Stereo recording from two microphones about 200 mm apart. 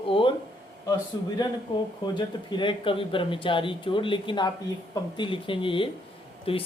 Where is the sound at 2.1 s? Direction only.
25° left (ahead or behind).